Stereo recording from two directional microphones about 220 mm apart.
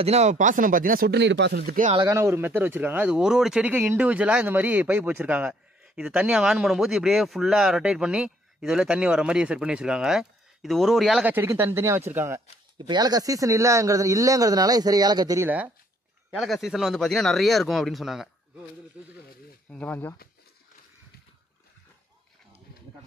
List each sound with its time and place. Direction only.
0.0 s speech: 30° right (ahead or behind); by 1.6 s 50° right (ahead or behind)
1.6 s speech: 35° right (ahead or behind)
2.0 s speech: 15° right (ahead or behind)
19.7 s speech: 5° left (ahead or behind)